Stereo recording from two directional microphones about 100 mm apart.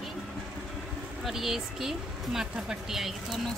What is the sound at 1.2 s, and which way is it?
A woman's voice, 5° right (ahead or behind).